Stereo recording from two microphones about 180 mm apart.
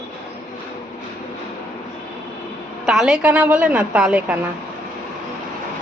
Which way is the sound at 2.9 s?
5° right (ahead or behind).